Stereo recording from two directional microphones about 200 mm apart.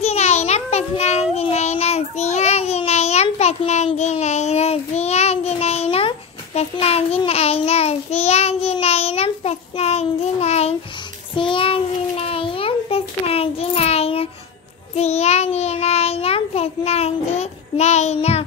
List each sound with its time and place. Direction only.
0.0 s child singing: 35° left (ahead or behind)
11.3 s a sound: 25° left (ahead or behind)
15.0 s child singing: 30° left (ahead or behind)